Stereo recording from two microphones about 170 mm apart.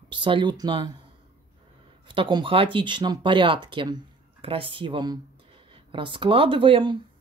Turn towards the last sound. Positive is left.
turn(degrees=-30)  # may be behind; listen again after turning